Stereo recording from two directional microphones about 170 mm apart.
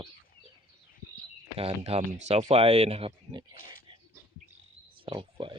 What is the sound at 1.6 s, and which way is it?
Speech, 35° right (ahead or behind).